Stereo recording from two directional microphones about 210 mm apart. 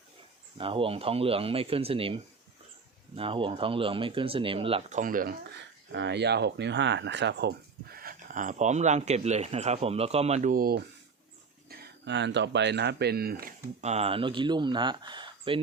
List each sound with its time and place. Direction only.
0.6 s speech: 25° right (ahead or behind)
3.2 s speech: 25° right (ahead or behind); by 5.4 s 40° right (ahead or behind)
5.9 s speech: 55° right (ahead or behind)
13.4 s speech: 30° right (ahead or behind)